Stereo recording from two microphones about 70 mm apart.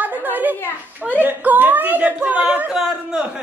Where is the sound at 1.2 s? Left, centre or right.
Right.